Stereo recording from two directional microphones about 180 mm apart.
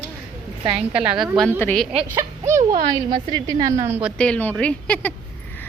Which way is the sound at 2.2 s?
15° right (ahead or behind).